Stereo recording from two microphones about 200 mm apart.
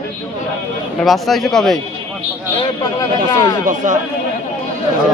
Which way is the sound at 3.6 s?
40° right (ahead or behind).